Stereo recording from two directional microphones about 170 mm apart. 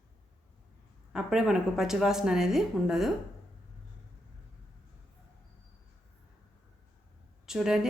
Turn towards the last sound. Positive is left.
turn(degrees=-5)  # may be behind; listen again after turning